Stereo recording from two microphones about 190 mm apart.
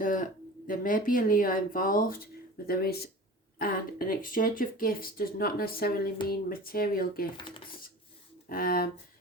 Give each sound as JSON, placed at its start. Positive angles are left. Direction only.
{"t": 0.0, "sound": "speech", "side_deg": 45}
{"t": 7.3, "sound": "speech", "side_deg": 25}
{"t": 8.4, "sound": "speech", "side_deg": 50}